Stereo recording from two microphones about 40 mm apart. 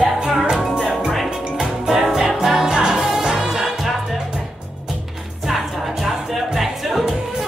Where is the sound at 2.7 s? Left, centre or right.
Centre.